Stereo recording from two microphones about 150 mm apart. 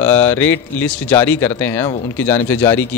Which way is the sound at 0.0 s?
15° left (ahead or behind).